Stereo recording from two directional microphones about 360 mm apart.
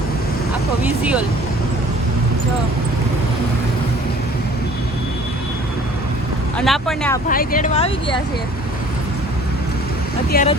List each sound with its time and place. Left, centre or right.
0.8 s speech: centre
6.6 s speech: centre
7.3 s speech: left
10.3 s speech: left